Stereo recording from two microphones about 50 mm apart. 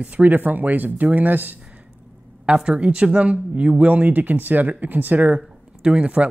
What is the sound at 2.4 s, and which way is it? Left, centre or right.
Speech, centre.